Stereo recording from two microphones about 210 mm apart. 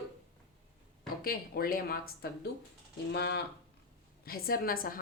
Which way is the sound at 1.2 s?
45° left (ahead or behind).